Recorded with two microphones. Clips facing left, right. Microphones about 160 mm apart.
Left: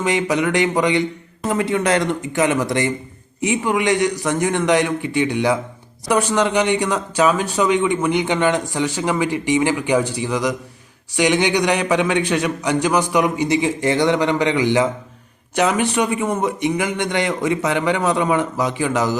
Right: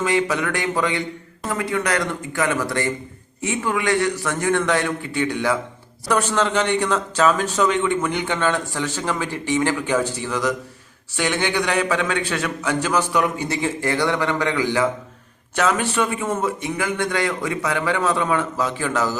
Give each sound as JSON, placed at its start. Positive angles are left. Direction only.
{"t": 0.0, "sound": "a man's voice", "side_deg": 20}